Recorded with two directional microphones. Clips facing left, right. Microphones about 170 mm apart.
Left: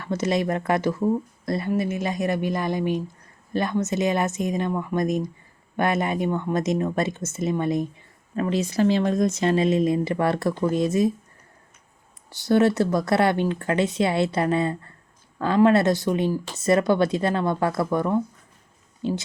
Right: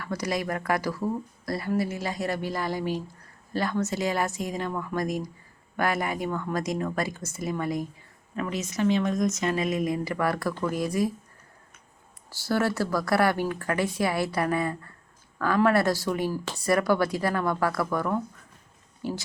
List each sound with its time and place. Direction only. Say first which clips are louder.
0.0 s speech: left 6 dB; 25° left (ahead or behind)
12.3 s speech: left 7 dB; 20° left (ahead or behind)